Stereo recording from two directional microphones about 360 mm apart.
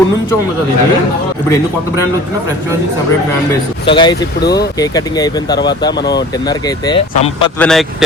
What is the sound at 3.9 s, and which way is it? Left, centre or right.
A man's voice, centre.